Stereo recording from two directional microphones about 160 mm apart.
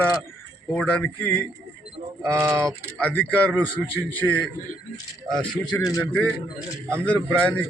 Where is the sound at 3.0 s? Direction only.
10° left (ahead or behind).